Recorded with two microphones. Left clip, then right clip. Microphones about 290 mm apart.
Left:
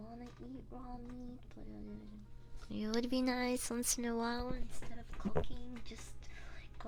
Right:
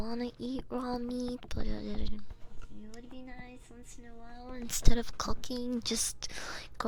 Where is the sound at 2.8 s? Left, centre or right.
Left.